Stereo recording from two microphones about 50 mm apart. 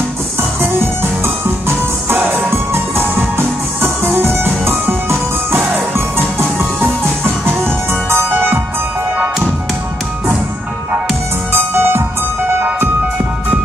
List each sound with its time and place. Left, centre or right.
2.0 s music: right
7.9 s music: right
11.5 s music: right